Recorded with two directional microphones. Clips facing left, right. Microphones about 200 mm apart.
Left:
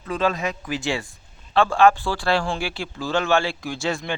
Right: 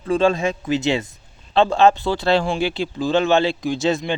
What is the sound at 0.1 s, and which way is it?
Speech, 30° right (ahead or behind).